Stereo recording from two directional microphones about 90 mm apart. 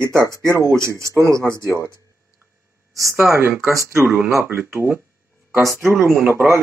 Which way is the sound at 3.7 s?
35° right (ahead or behind).